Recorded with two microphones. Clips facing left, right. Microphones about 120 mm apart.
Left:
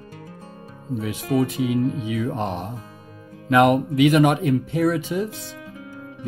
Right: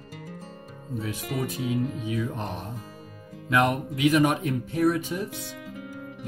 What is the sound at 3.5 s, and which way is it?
Speech, 70° left (ahead or behind).